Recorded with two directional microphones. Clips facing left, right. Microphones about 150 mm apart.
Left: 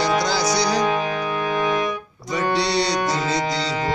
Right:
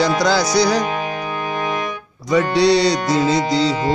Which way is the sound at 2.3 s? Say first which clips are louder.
Right 7 dB; 90° right.